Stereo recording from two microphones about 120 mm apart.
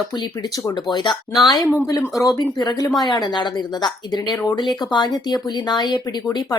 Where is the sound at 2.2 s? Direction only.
30° left (ahead or behind).